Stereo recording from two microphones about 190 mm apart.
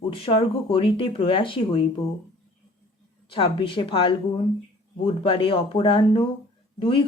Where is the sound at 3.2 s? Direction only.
30° left (ahead or behind).